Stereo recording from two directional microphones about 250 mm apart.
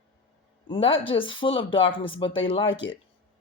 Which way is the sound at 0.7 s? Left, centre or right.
Left.